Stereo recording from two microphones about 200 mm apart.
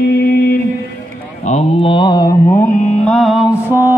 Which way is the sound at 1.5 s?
30° left (ahead or behind).